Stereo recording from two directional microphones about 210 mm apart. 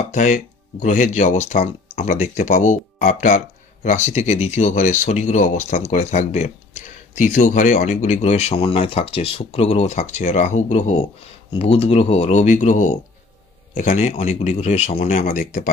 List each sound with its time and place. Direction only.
0.1 s speech: 35° left (ahead or behind)